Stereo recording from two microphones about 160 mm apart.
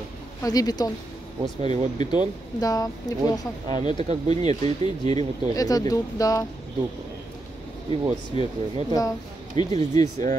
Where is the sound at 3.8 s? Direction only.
45° right (ahead or behind).